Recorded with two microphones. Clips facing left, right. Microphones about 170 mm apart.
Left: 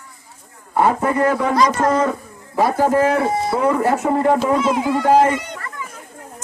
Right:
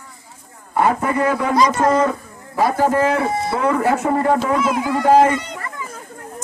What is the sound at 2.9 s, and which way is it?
Speech, centre (ahead or behind).